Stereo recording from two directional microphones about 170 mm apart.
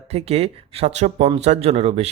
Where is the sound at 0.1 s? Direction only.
35° right (ahead or behind).